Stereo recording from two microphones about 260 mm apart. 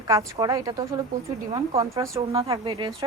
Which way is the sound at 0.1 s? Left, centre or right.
Centre.